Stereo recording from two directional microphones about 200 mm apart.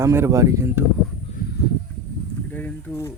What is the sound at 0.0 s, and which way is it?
Speech, 15° right (ahead or behind).